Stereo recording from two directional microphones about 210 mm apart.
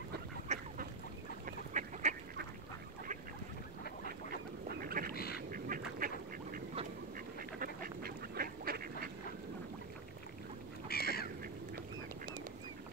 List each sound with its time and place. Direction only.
0.5 s duck: 30° right (ahead or behind)
4.6 s duck: 45° right (ahead or behind)
5.1 s duck: 45° left (ahead or behind)
5.5 s duck: 40° right (ahead or behind)
7.6 s duck: 45° right (ahead or behind)
10.9 s duck: 45° left (ahead or behind)